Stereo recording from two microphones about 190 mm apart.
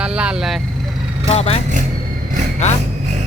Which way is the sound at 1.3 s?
35° left (ahead or behind).